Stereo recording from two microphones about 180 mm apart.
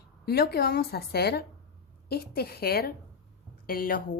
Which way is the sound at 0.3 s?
60° left (ahead or behind).